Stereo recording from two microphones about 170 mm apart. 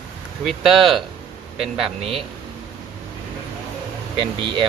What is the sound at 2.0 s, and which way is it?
Speech, 35° right (ahead or behind).